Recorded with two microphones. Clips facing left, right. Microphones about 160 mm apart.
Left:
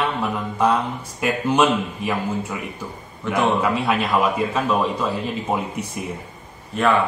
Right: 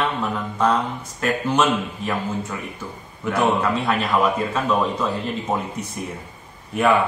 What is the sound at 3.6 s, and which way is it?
A man's voice, 10° left (ahead or behind).